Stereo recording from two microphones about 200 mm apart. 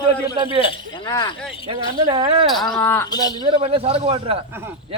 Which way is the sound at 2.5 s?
Centre (ahead or behind).